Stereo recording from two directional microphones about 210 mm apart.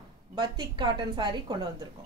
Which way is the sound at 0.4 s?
20° right (ahead or behind).